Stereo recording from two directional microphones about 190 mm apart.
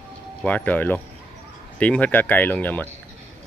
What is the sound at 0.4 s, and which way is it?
Speech, 5° left (ahead or behind).